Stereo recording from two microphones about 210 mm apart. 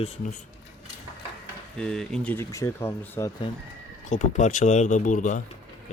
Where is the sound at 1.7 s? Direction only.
5° left (ahead or behind).